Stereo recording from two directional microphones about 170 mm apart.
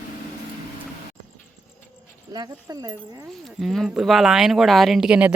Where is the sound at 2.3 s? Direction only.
25° right (ahead or behind).